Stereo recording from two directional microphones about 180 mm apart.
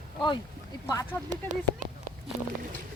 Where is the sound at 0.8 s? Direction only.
15° left (ahead or behind).